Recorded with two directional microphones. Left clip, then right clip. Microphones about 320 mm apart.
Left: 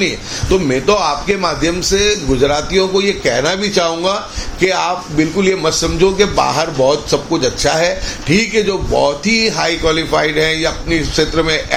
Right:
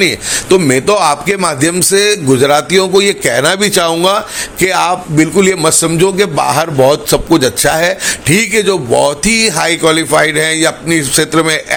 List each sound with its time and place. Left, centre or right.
0.5 s a man's voice: right